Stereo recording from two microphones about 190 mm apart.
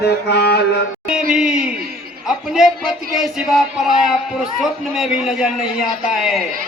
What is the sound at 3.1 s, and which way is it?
A man's voice, centre (ahead or behind).